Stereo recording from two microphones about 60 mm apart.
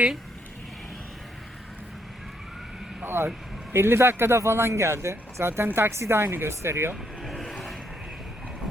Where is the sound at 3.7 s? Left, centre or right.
Right.